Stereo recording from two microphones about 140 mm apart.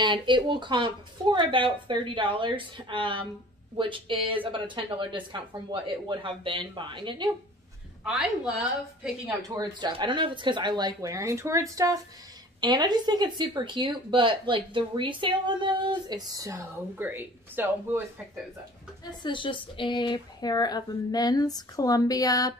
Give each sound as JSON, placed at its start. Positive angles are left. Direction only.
{"t": 0.0, "sound": "speech", "side_deg": -35}
{"t": 8.0, "sound": "a woman's voice", "side_deg": -5}
{"t": 9.6, "sound": "speech", "side_deg": -30}
{"t": 19.2, "sound": "speech", "side_deg": 35}